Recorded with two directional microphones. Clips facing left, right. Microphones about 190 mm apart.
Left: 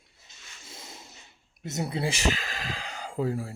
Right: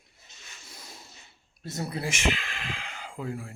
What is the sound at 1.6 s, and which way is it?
Speech, 20° left (ahead or behind).